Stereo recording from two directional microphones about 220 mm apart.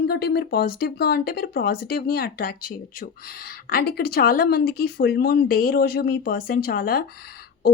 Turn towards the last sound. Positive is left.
turn(degrees=45)  # may be behind; listen again after turning